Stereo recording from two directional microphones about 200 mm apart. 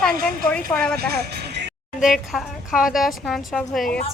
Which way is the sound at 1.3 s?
55° right (ahead or behind).